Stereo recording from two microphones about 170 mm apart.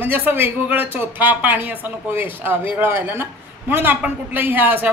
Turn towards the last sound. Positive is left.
turn(degrees=-10)  # may be behind; listen again after turning